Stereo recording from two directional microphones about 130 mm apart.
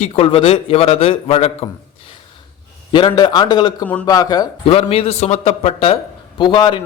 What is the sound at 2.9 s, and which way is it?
A man's voice, 40° left (ahead or behind).